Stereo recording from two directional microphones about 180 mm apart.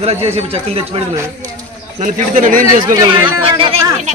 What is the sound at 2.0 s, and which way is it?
Speech, 45° right (ahead or behind).